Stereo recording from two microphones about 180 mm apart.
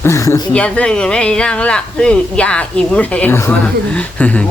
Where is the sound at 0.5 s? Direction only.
5° left (ahead or behind).